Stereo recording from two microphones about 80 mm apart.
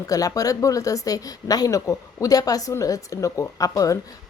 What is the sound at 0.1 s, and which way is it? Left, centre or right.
A woman's voice, left.